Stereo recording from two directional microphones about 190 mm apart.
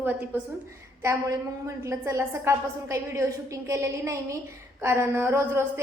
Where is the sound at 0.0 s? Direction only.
10° right (ahead or behind).